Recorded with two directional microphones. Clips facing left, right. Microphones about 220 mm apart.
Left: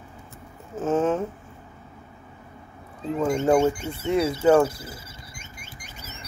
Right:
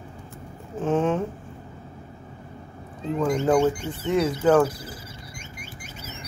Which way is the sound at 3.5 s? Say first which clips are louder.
Even; 25° left (ahead or behind).